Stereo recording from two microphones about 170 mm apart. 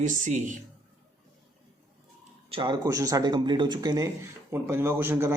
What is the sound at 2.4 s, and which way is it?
Speech, 30° right (ahead or behind).